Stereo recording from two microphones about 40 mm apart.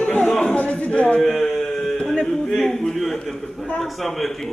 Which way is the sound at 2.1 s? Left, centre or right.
Left.